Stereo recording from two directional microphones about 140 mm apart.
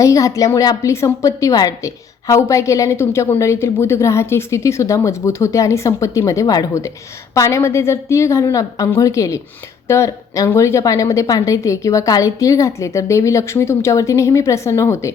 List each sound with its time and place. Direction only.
0.0 s a woman's voice: 25° left (ahead or behind)